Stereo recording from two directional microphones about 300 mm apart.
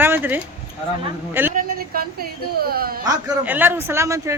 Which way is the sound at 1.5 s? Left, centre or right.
Right.